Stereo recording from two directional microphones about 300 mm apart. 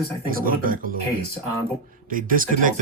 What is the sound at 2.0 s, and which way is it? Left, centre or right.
Speech, right.